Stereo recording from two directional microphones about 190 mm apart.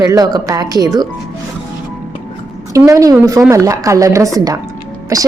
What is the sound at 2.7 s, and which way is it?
A woman's voice, 15° right (ahead or behind).